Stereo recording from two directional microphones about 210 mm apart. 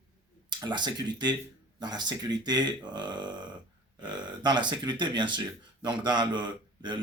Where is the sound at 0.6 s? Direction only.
20° right (ahead or behind).